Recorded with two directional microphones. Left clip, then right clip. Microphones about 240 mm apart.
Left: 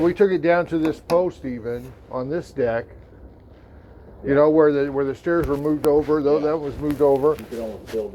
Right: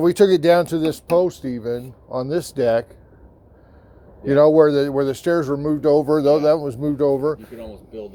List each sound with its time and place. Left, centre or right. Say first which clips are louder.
0.0 s speech: right 3 dB; right
4.3 s speech: right 3 dB; right